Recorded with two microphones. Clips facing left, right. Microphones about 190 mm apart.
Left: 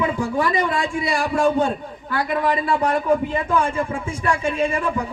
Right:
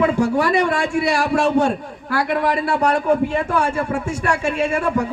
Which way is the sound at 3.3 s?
75° right (ahead or behind).